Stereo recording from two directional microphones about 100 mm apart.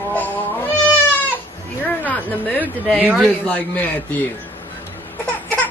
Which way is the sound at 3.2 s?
15° left (ahead or behind).